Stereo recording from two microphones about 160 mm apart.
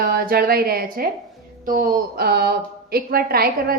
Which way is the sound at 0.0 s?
70° right (ahead or behind).